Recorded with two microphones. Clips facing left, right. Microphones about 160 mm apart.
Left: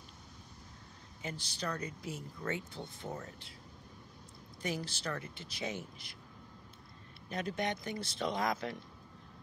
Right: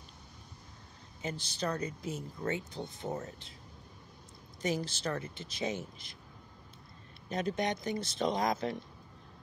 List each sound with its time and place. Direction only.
1.2 s speech: 20° right (ahead or behind)
4.6 s speech: 20° right (ahead or behind)
7.2 s speech: 20° right (ahead or behind)